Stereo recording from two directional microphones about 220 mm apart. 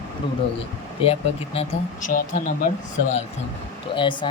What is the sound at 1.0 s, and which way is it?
Speech, 25° left (ahead or behind).